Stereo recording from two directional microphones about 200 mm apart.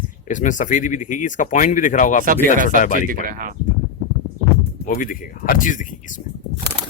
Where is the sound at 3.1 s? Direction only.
45° right (ahead or behind).